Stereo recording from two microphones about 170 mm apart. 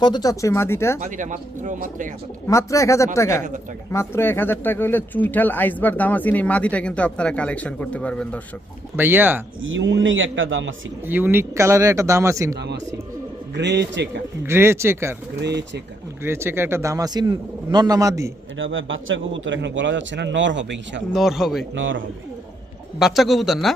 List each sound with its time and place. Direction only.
0.0 s speech: 25° left (ahead or behind)
0.9 s speech: 45° right (ahead or behind)
2.5 s speech: 15° left (ahead or behind)
9.0 s a man's voice: 10° right (ahead or behind)
9.7 s a man's voice: 90° right
11.0 s a man's voice: 10° right (ahead or behind)
13.5 s a man's voice: 90° right
14.4 s a man's voice: 15° right (ahead or behind)
15.4 s a man's voice: 90° right
16.2 s a man's voice: 15° right (ahead or behind)
18.5 s a man's voice: 90° right
21.1 s speech: centre (ahead or behind)
23.0 s speech: centre (ahead or behind)